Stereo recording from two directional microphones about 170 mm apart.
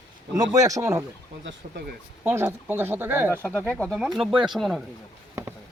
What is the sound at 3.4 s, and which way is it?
Speech, 10° left (ahead or behind).